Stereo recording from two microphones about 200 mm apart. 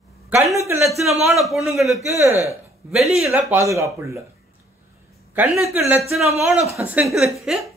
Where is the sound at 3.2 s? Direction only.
5° right (ahead or behind).